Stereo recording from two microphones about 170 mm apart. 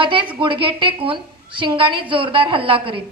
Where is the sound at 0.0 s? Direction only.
30° right (ahead or behind).